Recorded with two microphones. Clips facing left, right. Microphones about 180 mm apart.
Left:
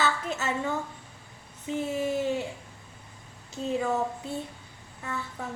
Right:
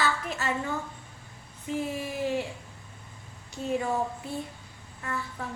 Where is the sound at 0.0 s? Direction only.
25° left (ahead or behind).